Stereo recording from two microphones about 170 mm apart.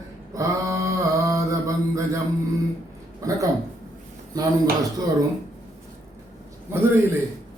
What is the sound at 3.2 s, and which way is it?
Speech, 20° right (ahead or behind).